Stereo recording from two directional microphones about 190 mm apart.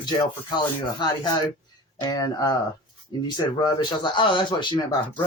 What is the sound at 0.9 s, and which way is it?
Speech, 20° left (ahead or behind).